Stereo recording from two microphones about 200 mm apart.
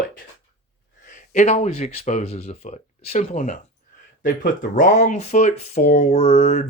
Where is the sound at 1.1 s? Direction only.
35° left (ahead or behind).